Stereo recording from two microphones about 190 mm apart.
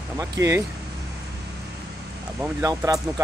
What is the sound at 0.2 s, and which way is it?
Speech, 15° right (ahead or behind).